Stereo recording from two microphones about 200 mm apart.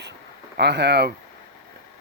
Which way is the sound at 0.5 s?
55° right (ahead or behind).